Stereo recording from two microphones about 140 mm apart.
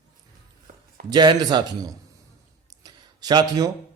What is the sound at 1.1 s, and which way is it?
Speech, 30° right (ahead or behind).